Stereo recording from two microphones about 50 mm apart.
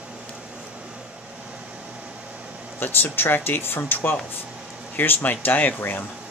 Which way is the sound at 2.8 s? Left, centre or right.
Left.